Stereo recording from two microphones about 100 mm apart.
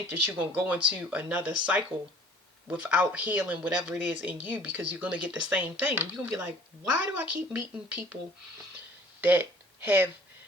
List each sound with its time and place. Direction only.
0.1 s speech: 20° right (ahead or behind)
9.2 s speech: 20° right (ahead or behind)